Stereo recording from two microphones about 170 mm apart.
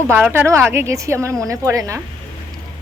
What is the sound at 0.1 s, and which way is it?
Speech, 15° right (ahead or behind).